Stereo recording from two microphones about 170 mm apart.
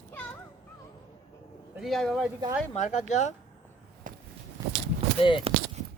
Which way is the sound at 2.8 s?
45° left (ahead or behind).